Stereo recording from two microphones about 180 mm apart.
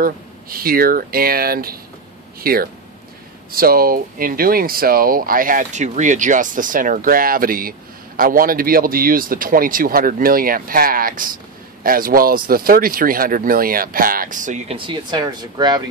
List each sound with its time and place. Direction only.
0.0 s speech: 55° right (ahead or behind)
14.9 s speech: 25° right (ahead or behind)